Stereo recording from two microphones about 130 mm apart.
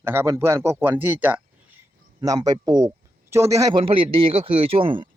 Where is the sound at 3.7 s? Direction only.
40° right (ahead or behind).